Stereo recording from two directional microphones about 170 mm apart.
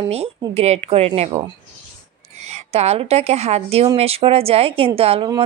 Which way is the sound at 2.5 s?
40° right (ahead or behind).